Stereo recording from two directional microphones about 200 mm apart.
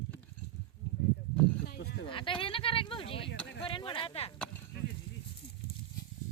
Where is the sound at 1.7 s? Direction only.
55° left (ahead or behind).